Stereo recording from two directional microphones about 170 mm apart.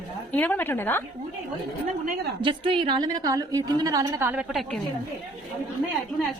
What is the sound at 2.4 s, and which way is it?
A woman's voice, 30° right (ahead or behind).